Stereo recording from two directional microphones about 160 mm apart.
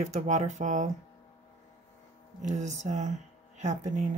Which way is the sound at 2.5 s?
45° right (ahead or behind).